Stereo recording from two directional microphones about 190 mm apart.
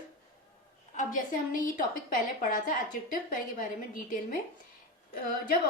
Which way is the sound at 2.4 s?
45° left (ahead or behind).